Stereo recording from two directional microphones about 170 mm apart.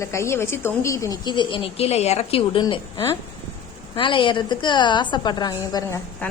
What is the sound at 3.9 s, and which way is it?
A woman's voice, 30° left (ahead or behind).